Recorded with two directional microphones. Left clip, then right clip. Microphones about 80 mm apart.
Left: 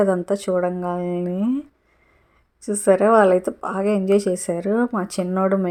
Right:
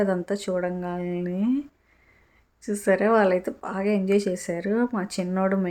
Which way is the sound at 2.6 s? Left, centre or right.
Left.